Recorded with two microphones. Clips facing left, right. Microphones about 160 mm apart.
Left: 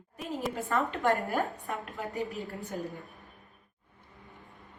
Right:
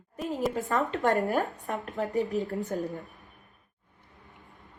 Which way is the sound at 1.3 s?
40° right (ahead or behind).